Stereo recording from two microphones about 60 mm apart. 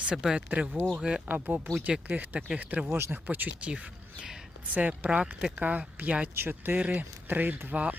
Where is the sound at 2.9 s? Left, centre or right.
Right.